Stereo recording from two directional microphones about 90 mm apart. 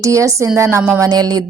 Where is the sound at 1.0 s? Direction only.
50° right (ahead or behind).